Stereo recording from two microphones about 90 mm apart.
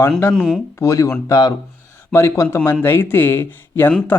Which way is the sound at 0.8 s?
35° left (ahead or behind).